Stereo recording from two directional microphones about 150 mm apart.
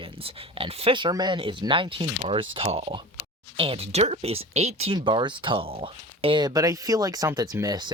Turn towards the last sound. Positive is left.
turn(degrees=-25)  # may be behind; listen again after turning